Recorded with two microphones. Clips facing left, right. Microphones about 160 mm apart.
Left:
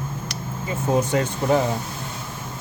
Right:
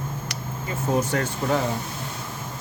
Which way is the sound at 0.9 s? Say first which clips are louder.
Left 3 dB; 20° left (ahead or behind).